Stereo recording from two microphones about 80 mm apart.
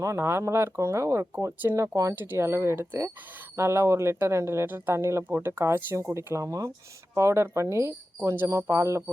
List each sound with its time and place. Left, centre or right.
0.0 s speech: right
2.1 s speech: right
7.1 s speech: right